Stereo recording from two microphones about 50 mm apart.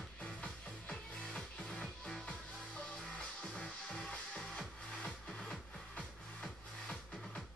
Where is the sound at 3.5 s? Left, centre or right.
Centre.